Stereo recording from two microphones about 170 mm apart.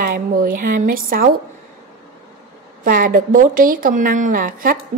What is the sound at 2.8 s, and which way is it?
A woman's voice, 55° right (ahead or behind).